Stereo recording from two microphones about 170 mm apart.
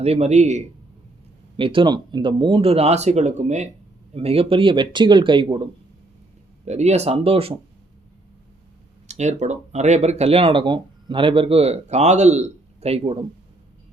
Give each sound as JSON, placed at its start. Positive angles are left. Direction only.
{"t": 0.0, "sound": "speech", "side_deg": -40}
{"t": 1.5, "sound": "speech", "side_deg": -30}
{"t": 6.7, "sound": "speech", "side_deg": -40}
{"t": 9.0, "sound": "speech", "side_deg": -40}